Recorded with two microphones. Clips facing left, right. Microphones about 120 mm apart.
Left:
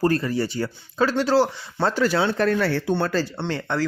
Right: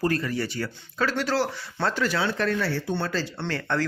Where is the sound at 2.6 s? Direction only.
65° left (ahead or behind).